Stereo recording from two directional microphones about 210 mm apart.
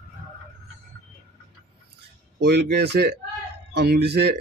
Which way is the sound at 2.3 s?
50° right (ahead or behind).